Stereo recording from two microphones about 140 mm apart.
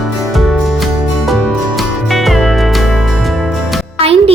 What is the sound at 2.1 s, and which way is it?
Music, centre (ahead or behind).